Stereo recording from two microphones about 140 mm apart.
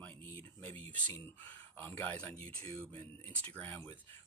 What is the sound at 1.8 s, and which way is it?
Speech, 10° left (ahead or behind).